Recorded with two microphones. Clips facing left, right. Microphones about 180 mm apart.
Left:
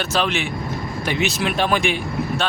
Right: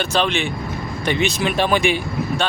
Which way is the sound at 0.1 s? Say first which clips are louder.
Right 2 dB; 5° left (ahead or behind).